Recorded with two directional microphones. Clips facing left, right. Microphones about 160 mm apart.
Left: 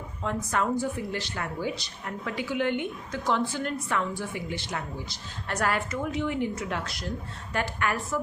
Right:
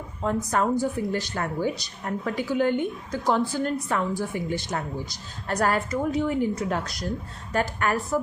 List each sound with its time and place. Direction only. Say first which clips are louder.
0.2 s speech: right 4 dB; 40° right (ahead or behind)